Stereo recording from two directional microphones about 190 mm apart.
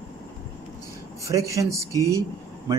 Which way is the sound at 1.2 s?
15° right (ahead or behind).